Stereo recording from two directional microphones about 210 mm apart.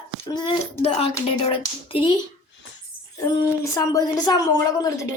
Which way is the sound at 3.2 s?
15° left (ahead or behind).